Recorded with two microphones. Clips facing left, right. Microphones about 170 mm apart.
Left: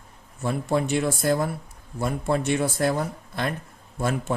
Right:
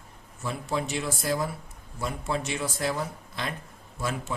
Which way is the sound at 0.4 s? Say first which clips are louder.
Left 6 dB; 55° left (ahead or behind).